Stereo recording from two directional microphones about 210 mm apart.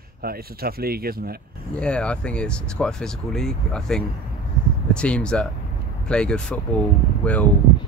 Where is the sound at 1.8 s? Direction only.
5° left (ahead or behind).